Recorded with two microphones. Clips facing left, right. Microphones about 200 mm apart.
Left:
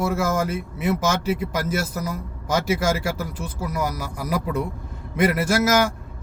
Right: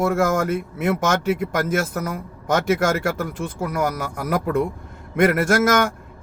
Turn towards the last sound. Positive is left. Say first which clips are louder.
# right 2 dB
turn(degrees=-55)  # may be behind; listen again after turning